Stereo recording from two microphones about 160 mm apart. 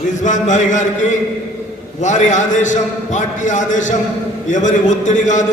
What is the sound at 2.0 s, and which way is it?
A man's voice, 50° left (ahead or behind).